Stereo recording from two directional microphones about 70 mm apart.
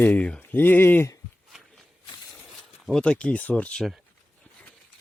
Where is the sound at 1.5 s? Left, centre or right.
Centre.